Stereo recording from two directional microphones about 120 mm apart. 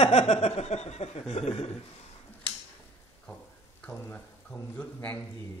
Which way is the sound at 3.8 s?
10° left (ahead or behind).